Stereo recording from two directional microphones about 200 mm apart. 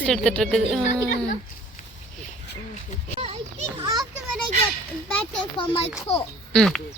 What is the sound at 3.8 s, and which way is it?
Speech, 20° right (ahead or behind).